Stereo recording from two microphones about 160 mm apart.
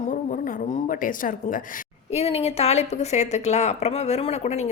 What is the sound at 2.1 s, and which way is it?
A woman's voice, 40° left (ahead or behind).